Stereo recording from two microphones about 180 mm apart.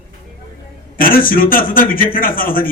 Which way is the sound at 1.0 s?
50° left (ahead or behind).